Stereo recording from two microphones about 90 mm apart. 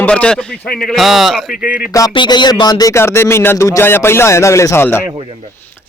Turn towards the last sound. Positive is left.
turn(degrees=25)  # may be behind; listen again after turning